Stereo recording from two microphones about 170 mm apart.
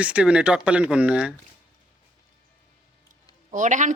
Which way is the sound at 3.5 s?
45° right (ahead or behind).